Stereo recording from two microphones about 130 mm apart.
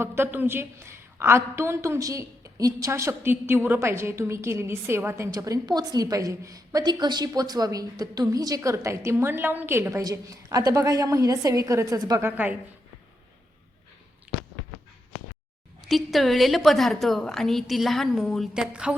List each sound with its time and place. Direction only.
0.0 s a woman's voice: 20° right (ahead or behind)
12.2 s a woman's voice: 15° right (ahead or behind)
14.3 s a sound: 5° right (ahead or behind)
15.8 s a woman's voice: centre (ahead or behind)